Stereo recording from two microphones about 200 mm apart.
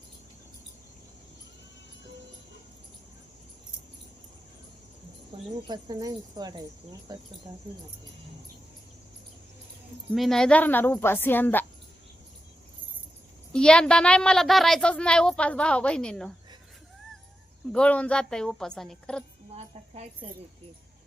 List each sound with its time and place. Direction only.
5.3 s speech: 25° right (ahead or behind)
10.2 s a woman's voice: centre (ahead or behind)
13.5 s speech: 5° left (ahead or behind)
17.7 s speech: 5° left (ahead or behind)
19.5 s cricket: 35° right (ahead or behind)